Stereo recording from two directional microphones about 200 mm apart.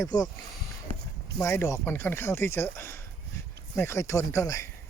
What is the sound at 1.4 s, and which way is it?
Speech, 15° left (ahead or behind).